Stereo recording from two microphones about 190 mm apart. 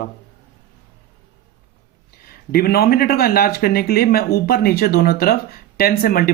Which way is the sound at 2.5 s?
55° left (ahead or behind).